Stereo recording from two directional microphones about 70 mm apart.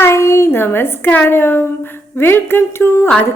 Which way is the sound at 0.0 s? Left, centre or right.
Left.